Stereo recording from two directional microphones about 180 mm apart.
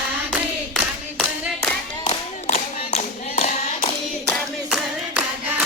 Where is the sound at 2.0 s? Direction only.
40° left (ahead or behind).